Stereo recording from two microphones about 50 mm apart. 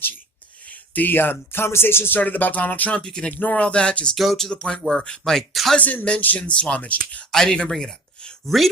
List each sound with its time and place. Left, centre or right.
0.7 s speech: left
2.1 s speech: left
3.0 s speech: centre
3.3 s speech: left
4.1 s speech: centre
4.5 s speech: centre
5.8 s speech: left
6.5 s speech: centre
6.7 s speech: left
7.3 s speech: centre